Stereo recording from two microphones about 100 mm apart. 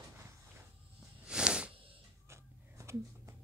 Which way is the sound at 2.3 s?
30° right (ahead or behind).